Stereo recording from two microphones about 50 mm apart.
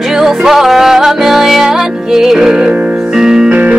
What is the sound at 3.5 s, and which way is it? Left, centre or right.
Music, right.